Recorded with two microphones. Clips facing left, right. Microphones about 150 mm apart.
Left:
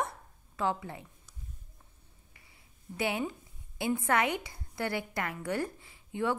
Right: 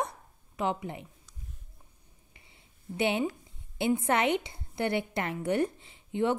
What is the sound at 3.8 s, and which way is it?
A woman's voice, 25° right (ahead or behind).